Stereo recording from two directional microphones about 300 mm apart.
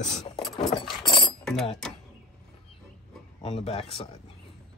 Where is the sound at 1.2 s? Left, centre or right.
Centre.